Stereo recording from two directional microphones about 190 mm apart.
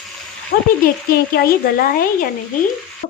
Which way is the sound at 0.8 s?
55° left (ahead or behind).